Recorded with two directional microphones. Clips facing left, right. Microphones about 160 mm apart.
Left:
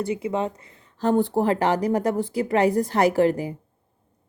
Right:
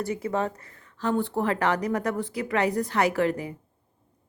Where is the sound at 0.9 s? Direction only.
40° left (ahead or behind).